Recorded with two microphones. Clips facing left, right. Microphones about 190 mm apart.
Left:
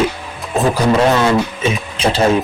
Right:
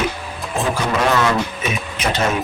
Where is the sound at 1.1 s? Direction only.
30° left (ahead or behind).